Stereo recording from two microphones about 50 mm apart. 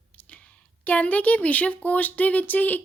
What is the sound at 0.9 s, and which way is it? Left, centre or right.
Speech, left.